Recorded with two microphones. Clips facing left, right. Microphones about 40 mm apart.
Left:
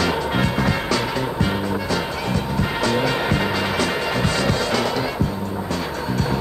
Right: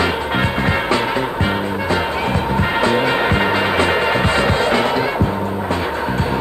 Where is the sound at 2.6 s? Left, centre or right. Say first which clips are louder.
Right 4 dB; right.